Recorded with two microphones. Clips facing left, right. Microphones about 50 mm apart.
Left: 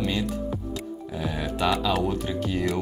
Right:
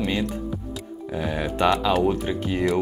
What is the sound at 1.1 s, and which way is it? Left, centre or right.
Speech, centre.